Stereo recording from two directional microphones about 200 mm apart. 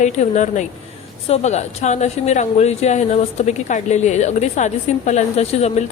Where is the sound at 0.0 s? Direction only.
35° left (ahead or behind).